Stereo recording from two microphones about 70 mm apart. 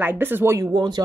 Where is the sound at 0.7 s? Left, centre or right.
Right.